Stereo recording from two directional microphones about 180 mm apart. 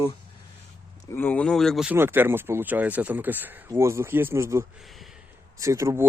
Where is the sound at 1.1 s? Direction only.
10° left (ahead or behind).